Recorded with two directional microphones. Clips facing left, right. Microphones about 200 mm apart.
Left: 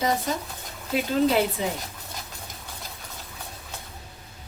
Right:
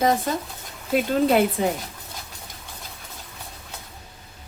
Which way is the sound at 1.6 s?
55° right (ahead or behind).